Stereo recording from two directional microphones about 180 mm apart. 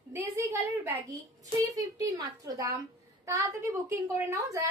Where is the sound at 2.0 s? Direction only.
20° right (ahead or behind).